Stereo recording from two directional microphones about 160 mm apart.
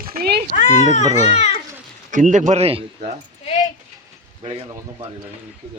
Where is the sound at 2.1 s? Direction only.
50° right (ahead or behind).